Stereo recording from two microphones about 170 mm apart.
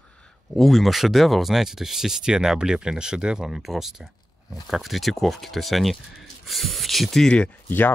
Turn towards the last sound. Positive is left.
turn(degrees=10)  # may be behind; listen again after turning